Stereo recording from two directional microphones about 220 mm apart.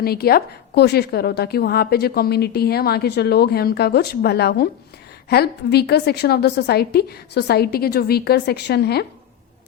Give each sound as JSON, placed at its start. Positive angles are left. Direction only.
{"t": 0.0, "sound": "a woman's voice", "side_deg": 45}